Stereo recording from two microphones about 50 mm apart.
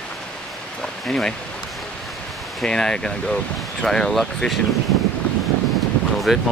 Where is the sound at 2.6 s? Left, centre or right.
Centre.